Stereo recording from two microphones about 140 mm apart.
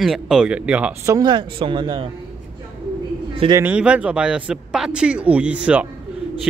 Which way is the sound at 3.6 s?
10° right (ahead or behind).